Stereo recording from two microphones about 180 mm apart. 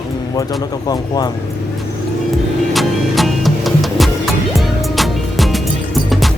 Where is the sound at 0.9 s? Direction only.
20° left (ahead or behind).